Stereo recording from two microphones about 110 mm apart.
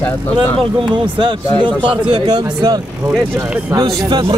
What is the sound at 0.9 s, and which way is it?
Speech, 50° right (ahead or behind).